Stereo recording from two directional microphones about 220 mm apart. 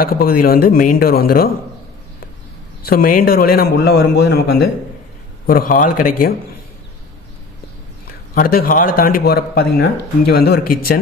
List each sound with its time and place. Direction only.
0.0 s a man's voice: 40° left (ahead or behind)
2.9 s a man's voice: 40° left (ahead or behind)
8.4 s a man's voice: 40° left (ahead or behind)